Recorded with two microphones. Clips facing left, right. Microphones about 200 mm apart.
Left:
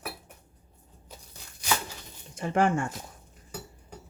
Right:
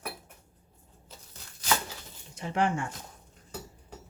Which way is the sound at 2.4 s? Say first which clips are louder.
Left 4 dB; 50° left (ahead or behind).